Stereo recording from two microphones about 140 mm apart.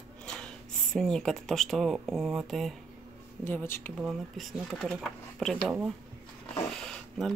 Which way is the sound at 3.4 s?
15° left (ahead or behind).